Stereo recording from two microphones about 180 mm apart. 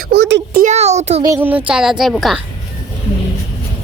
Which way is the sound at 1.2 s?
15° right (ahead or behind).